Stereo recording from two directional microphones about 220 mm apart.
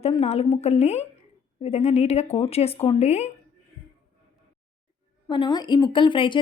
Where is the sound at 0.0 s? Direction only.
25° left (ahead or behind).